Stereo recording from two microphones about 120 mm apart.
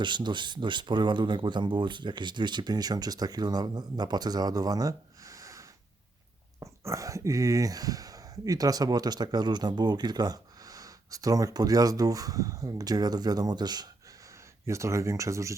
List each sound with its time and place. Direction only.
0.0 s speech: 40° right (ahead or behind)
14.7 s speech: 25° right (ahead or behind)